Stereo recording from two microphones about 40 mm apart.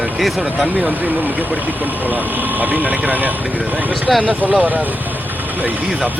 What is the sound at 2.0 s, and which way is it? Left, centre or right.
Speech, right.